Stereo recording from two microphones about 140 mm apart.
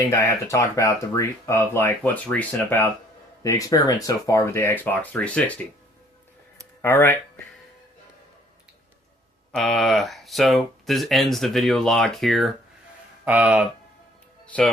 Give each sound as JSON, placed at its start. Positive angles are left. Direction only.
{"t": 0.1, "sound": "speech", "side_deg": 20}
{"t": 6.8, "sound": "speech", "side_deg": 15}
{"t": 9.6, "sound": "speech", "side_deg": 0}
{"t": 13.2, "sound": "speech", "side_deg": -10}
{"t": 14.4, "sound": "music", "side_deg": 10}